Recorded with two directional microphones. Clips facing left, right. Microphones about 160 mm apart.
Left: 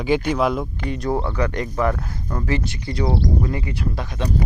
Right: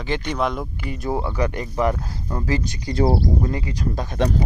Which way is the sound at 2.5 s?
40° right (ahead or behind).